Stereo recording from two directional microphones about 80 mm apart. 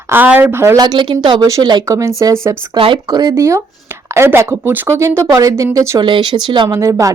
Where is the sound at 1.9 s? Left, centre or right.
Right.